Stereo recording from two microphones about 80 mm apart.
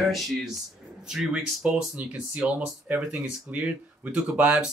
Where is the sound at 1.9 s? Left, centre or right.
Centre.